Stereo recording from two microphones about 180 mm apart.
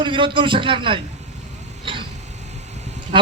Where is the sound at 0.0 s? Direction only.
25° right (ahead or behind).